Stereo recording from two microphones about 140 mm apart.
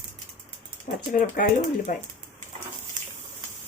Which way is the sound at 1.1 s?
80° left.